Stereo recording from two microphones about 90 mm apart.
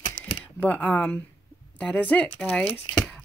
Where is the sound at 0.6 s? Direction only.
15° left (ahead or behind).